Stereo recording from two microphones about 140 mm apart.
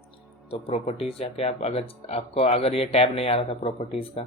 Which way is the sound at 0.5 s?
50° left (ahead or behind).